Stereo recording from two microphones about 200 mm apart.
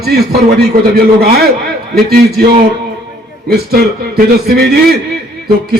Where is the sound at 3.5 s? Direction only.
50° right (ahead or behind).